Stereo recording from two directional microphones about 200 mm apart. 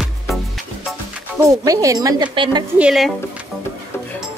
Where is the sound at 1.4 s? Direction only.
15° right (ahead or behind).